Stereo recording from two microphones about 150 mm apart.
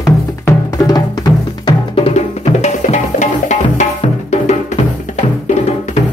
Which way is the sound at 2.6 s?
50° left (ahead or behind).